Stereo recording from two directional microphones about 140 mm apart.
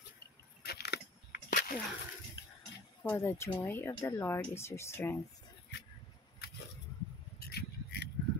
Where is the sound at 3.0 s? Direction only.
15° left (ahead or behind).